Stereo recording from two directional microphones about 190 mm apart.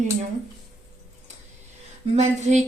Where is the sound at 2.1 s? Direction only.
35° right (ahead or behind).